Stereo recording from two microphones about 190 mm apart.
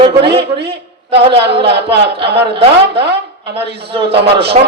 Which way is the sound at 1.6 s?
60° right (ahead or behind).